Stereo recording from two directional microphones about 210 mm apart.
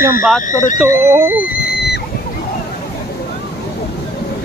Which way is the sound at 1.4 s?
50° left (ahead or behind).